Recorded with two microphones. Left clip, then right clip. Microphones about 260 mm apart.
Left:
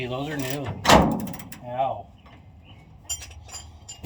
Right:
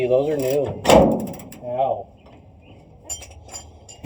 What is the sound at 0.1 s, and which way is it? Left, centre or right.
Speech, left.